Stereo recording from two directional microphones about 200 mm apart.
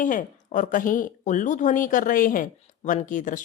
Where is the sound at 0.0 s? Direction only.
40° left (ahead or behind).